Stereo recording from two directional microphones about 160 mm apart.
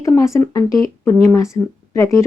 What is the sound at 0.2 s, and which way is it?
Speech, 20° left (ahead or behind).